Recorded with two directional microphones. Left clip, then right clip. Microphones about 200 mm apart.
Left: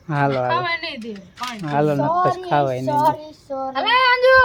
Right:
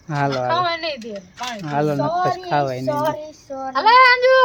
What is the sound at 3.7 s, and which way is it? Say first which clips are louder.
Speech: right 5 dB; 25° right (ahead or behind).